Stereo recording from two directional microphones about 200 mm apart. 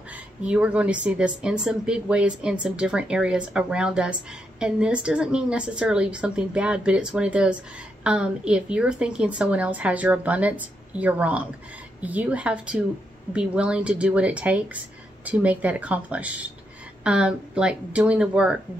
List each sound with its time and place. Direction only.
0.4 s a woman's voice: 5° right (ahead or behind)